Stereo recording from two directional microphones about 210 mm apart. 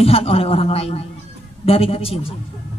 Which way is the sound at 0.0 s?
30° left (ahead or behind).